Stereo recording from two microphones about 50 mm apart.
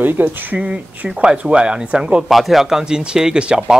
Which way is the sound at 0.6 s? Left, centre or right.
Right.